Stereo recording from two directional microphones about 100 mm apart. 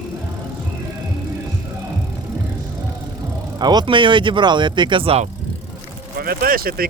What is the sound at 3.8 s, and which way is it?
Speech, 55° right (ahead or behind).